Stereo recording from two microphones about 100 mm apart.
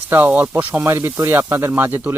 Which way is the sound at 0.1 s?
20° right (ahead or behind).